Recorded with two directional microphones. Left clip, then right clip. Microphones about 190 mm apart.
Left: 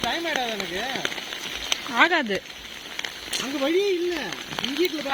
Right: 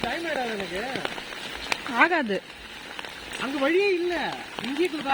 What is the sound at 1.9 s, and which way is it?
Speech, 10° right (ahead or behind).